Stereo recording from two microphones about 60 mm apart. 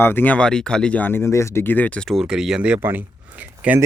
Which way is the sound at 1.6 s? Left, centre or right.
Left.